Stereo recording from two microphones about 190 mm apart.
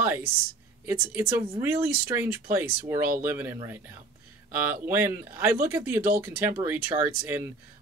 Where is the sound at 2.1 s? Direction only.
15° right (ahead or behind).